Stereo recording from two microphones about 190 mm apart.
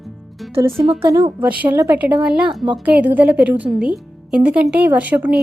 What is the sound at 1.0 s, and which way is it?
A woman's voice, 15° right (ahead or behind).